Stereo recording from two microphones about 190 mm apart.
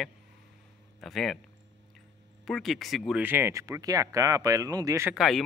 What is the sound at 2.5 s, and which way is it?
Speech, centre (ahead or behind).